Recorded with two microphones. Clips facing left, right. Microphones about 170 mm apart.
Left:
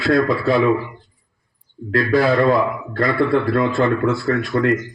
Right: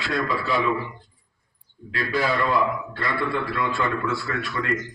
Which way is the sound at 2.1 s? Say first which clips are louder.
Left 7 dB; 50° left (ahead or behind).